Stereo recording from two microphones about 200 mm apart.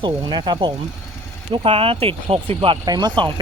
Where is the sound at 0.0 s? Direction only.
20° right (ahead or behind).